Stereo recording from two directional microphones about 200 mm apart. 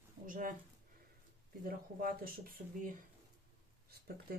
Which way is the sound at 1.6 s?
45° right (ahead or behind).